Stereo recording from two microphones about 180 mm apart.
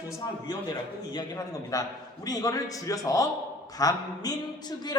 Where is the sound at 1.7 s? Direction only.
20° left (ahead or behind).